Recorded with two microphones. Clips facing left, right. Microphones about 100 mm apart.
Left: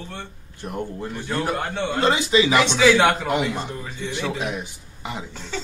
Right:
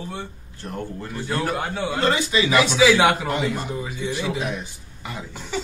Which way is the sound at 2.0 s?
20° left (ahead or behind).